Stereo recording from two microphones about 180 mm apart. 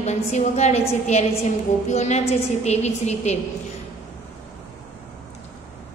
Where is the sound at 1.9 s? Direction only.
40° left (ahead or behind).